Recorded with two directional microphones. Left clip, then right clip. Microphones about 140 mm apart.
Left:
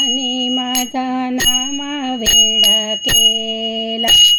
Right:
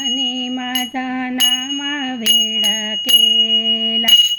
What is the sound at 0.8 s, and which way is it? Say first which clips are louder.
Bell: left 2 dB; 40° left (ahead or behind).